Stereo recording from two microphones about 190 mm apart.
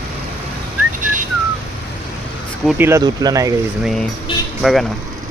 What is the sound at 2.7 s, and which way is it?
Speech, 15° right (ahead or behind).